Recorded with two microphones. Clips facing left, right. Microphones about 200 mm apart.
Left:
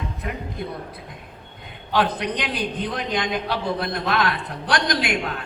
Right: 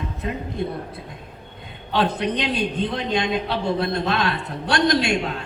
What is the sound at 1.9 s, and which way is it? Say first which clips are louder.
A man's voice: right 1 dB; 25° right (ahead or behind).